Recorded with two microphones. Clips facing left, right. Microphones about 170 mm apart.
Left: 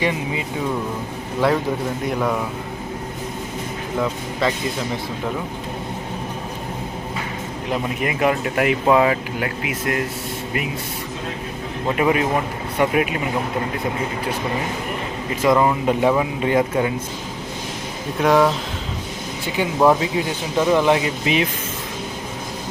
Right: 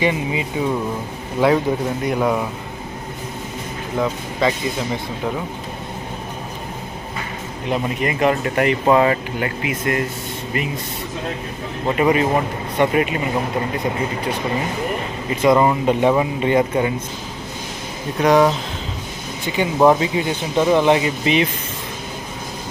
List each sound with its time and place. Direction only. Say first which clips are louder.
0.0 s speech: right 3 dB; centre (ahead or behind)
1.4 s speech: right 3 dB; centre (ahead or behind)
4.0 s speech: right 2 dB; 5° right (ahead or behind)
7.7 s speech: right 2 dB; 5° left (ahead or behind)
11.9 s speech: right 2 dB; centre (ahead or behind)
15.4 s speech: right 2 dB; centre (ahead or behind)
18.2 s speech: right 2 dB; centre (ahead or behind)